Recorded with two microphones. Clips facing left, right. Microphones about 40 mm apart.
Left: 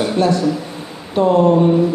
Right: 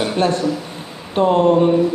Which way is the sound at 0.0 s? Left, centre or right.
Right.